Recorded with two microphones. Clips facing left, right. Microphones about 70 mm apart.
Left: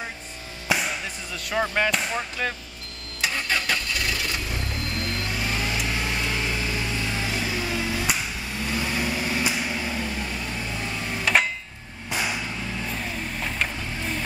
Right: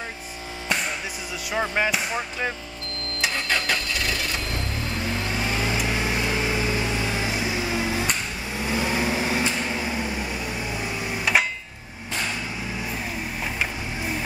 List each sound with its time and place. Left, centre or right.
0.7 s music: centre
1.5 s speech: centre
3.2 s vehicle: centre
4.9 s vehicle: centre
9.4 s a sound: centre
9.7 s microwave oven: centre
12.1 s vehicle: centre
12.8 s vehicle: centre